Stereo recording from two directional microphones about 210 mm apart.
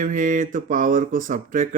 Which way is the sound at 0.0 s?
35° right (ahead or behind).